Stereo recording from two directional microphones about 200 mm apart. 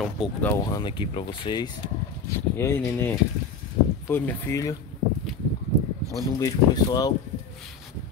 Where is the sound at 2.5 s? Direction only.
10° left (ahead or behind).